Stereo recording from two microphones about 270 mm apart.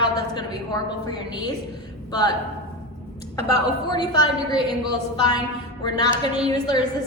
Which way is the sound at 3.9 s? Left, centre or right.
Centre.